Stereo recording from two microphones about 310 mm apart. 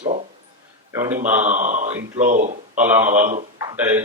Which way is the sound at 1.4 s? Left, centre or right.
Right.